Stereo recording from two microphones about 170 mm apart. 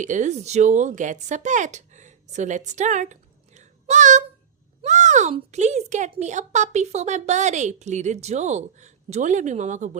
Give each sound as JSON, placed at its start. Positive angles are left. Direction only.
{"t": 0.0, "sound": "speech", "side_deg": -45}
{"t": 4.8, "sound": "a sound", "side_deg": -45}
{"t": 5.3, "sound": "a woman's voice", "side_deg": -40}